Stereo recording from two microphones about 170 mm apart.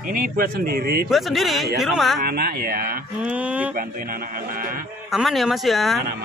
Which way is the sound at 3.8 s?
60° right (ahead or behind).